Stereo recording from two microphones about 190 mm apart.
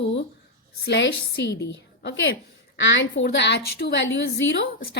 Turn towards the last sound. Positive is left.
turn(degrees=75)  # may be behind; listen again after turning